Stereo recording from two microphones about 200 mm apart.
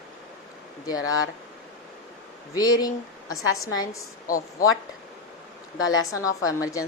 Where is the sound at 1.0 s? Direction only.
90° left.